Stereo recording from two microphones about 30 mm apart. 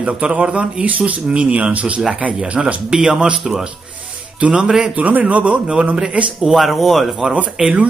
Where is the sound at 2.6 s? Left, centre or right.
Right.